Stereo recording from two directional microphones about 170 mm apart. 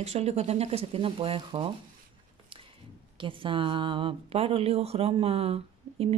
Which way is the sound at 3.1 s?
30° right (ahead or behind).